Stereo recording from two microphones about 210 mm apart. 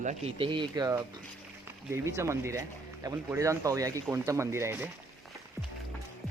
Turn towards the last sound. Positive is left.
turn(degrees=-15)  # may be behind; listen again after turning